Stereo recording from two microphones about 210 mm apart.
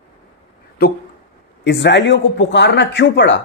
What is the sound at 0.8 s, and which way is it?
A man's voice, 50° left (ahead or behind).